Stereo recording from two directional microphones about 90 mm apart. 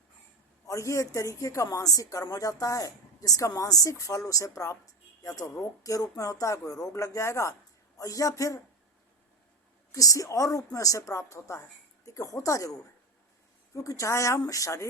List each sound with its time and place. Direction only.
0.7 s a woman's voice: 35° left (ahead or behind)
9.9 s a woman's voice: 40° left (ahead or behind)